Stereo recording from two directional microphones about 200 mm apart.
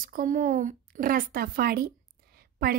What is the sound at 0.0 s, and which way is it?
Speech, 45° right (ahead or behind).